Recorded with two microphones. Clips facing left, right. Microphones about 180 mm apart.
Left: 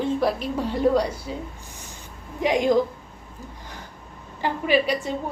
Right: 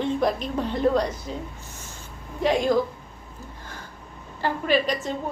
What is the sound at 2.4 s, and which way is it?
Speech, 15° left (ahead or behind).